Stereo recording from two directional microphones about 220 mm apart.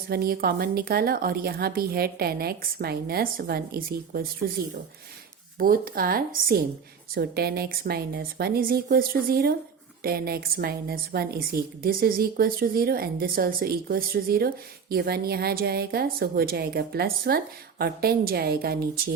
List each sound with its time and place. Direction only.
0.1 s a woman's voice: 45° right (ahead or behind)
5.5 s a woman's voice: 40° right (ahead or behind)